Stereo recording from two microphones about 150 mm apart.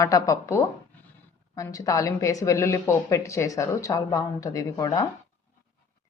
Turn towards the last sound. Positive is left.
turn(degrees=20)  # may be behind; listen again after turning